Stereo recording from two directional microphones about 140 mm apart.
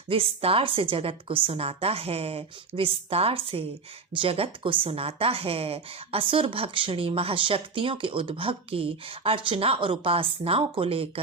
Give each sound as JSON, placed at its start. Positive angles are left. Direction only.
{"t": 0.1, "sound": "a woman's voice", "side_deg": -40}